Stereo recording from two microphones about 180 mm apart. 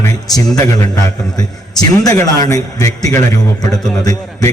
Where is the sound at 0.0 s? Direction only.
20° left (ahead or behind).